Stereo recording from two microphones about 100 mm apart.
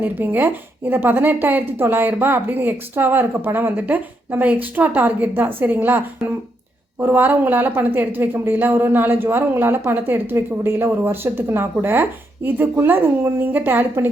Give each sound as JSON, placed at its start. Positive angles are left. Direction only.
{"t": 0.0, "sound": "speech", "side_deg": -20}